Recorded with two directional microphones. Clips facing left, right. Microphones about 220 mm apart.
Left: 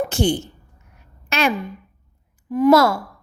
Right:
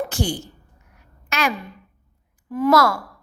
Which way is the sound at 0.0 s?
25° left (ahead or behind).